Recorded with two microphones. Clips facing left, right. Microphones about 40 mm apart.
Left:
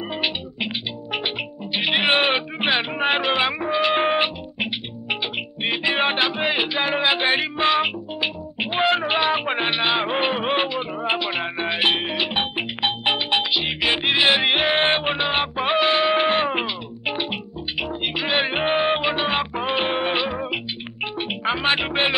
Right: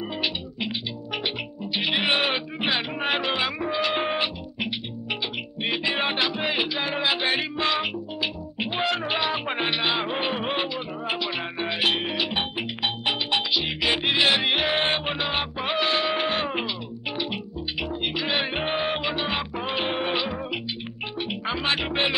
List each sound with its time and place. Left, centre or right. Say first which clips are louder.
0.1 s music: left 3 dB; left